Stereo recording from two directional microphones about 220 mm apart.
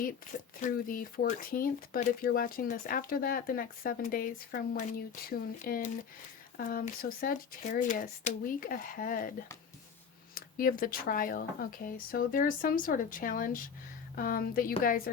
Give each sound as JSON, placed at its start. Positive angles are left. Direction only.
{"t": 0.0, "sound": "speech", "side_deg": 40}
{"t": 10.3, "sound": "speech", "side_deg": 40}